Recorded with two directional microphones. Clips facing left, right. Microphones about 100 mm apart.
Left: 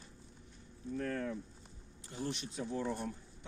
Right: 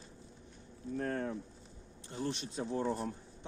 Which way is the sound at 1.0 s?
35° right (ahead or behind).